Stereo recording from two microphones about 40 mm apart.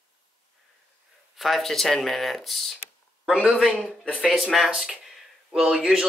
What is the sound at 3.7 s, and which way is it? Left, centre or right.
Speech, centre.